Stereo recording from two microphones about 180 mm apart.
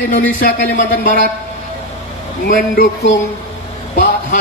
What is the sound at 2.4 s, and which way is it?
Speech, 50° left (ahead or behind).